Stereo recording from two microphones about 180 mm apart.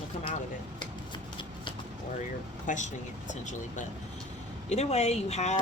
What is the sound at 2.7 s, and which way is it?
Speech, 45° left (ahead or behind).